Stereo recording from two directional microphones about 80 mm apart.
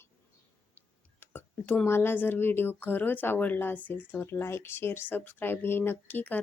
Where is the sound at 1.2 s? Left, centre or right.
Left.